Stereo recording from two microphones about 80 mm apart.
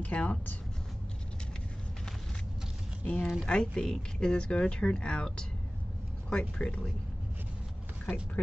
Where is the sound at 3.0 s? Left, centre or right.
Centre.